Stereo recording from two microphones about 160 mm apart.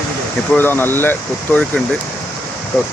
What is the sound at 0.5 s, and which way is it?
Speech, 10° left (ahead or behind).